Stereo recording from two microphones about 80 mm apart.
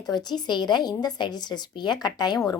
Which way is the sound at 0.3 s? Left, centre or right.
Left.